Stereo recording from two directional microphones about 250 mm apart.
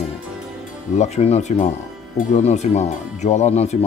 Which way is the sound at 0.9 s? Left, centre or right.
Left.